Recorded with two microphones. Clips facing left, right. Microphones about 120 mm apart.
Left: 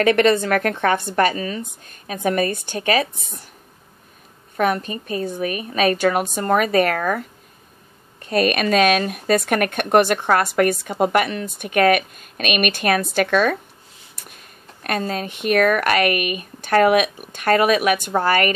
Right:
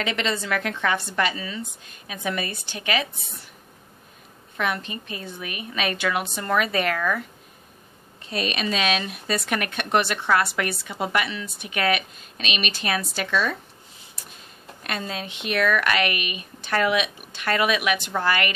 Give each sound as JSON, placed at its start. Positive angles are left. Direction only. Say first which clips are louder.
{"t": 0.0, "sound": "speech", "louder": "left 11 dB", "side_deg": 55}
{"t": 4.6, "sound": "a woman's voice", "louder": "left 7 dB", "side_deg": 45}
{"t": 14.8, "sound": "speech", "louder": "left 7 dB", "side_deg": 45}